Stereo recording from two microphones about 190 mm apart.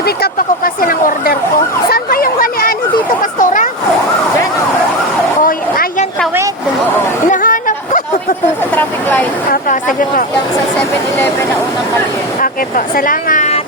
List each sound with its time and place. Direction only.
0.0 s speech: 55° left (ahead or behind)
1.9 s chatter: 50° left (ahead or behind)
3.3 s vehicle: 45° left (ahead or behind)
5.4 s a sound: 50° left (ahead or behind)
7.3 s chatter: 45° left (ahead or behind)
8.7 s speech: 10° left (ahead or behind)
9.5 s speech: 45° left (ahead or behind)
12.4 s speech: 45° left (ahead or behind)